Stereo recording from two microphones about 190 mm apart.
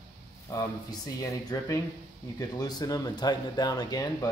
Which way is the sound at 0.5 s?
15° left (ahead or behind).